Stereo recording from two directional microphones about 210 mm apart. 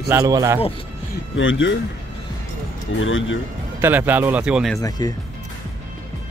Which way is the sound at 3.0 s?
65° left (ahead or behind).